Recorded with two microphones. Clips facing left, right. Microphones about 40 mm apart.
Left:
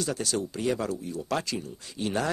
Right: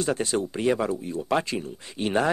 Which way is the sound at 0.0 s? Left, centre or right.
Right.